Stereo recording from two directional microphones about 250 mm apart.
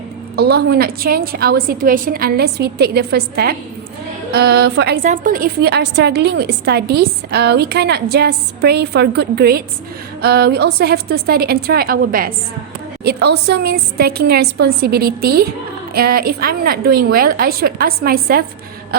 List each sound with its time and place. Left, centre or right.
0.3 s a woman's voice: right